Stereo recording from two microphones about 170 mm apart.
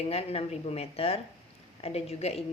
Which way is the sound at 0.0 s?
35° left (ahead or behind).